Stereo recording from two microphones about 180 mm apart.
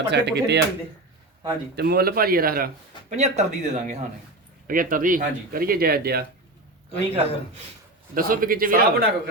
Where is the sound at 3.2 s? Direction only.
40° right (ahead or behind).